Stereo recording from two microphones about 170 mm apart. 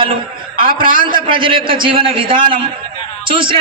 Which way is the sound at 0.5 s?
55° right (ahead or behind).